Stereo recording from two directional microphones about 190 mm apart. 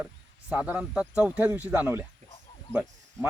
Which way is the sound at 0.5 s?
5° right (ahead or behind).